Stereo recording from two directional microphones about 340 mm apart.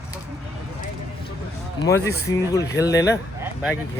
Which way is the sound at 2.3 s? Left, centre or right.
Centre.